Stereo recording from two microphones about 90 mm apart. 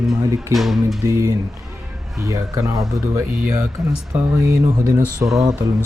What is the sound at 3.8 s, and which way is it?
Speech, centre (ahead or behind).